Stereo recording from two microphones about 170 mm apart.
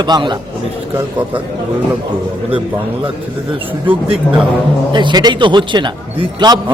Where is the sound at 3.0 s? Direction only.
30° right (ahead or behind).